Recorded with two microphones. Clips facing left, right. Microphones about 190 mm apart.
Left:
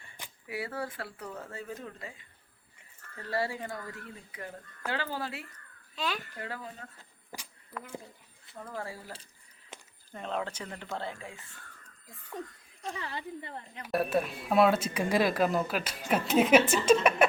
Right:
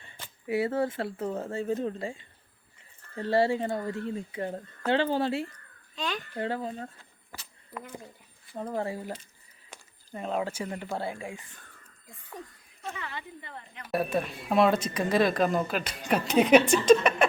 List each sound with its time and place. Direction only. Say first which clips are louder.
0.4 s speech: right 9 dB; 25° right (ahead or behind)
6.0 s a woman's voice: right 1 dB; 5° left (ahead or behind)
6.3 s speech: right 9 dB; 30° right (ahead or behind)
8.5 s speech: right 8 dB; 25° right (ahead or behind)
10.1 s speech: right 4 dB; 5° right (ahead or behind)
12.9 s a woman's voice: left 2 dB; 35° left (ahead or behind)
13.9 s speech: even; centre (ahead or behind)